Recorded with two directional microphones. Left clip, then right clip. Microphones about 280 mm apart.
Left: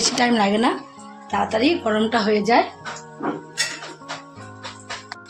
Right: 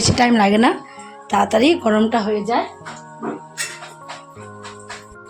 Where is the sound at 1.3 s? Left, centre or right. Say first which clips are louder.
Right 5 dB; right.